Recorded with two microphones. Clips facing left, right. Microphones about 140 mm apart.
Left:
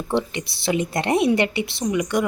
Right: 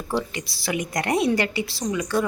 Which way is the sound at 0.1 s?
25° left (ahead or behind).